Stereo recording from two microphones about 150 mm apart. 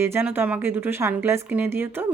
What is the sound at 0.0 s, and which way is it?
Speech, 15° right (ahead or behind).